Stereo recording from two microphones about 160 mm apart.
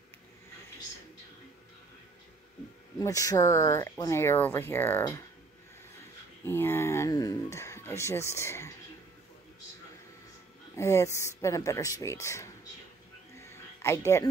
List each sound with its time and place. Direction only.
3.0 s speech: 20° left (ahead or behind)
6.4 s speech: 15° left (ahead or behind)
10.8 s speech: 15° left (ahead or behind)
13.4 s a sound: 15° left (ahead or behind)